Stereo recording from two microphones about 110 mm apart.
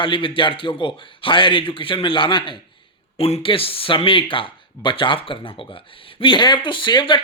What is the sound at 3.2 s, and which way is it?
Speech, 60° left (ahead or behind).